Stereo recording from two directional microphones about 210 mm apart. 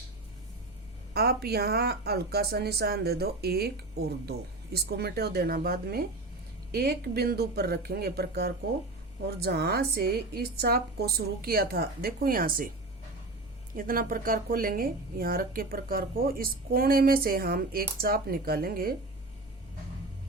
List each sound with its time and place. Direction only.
1.1 s speech: 50° right (ahead or behind)
13.7 s speech: 40° right (ahead or behind)